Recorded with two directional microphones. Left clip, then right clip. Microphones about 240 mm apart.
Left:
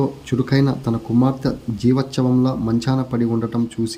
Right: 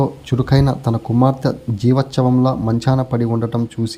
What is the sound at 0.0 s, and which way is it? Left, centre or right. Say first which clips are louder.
Speech: right 2 dB; centre.